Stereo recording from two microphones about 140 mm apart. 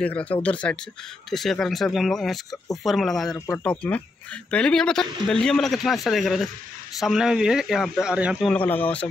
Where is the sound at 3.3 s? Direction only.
20° left (ahead or behind).